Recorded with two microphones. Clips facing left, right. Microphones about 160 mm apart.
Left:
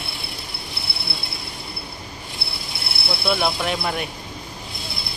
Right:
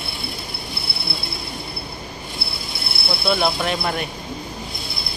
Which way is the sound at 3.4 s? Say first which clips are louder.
Right 2 dB; 10° left (ahead or behind).